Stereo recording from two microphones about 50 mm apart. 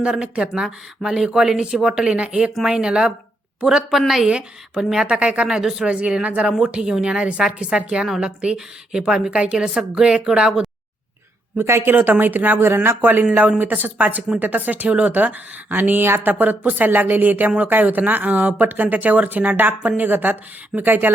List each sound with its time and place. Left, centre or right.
0.0 s a woman's voice: centre
3.8 s speech: centre
5.0 s speech: right
5.9 s a woman's voice: right
6.7 s a woman's voice: centre
11.5 s speech: right
12.2 s speech: right
12.5 s speech: right